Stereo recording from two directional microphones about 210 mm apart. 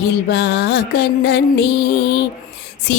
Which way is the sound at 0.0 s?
55° left (ahead or behind).